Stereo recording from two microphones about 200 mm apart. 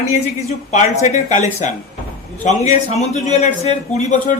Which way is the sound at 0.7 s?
35° left (ahead or behind).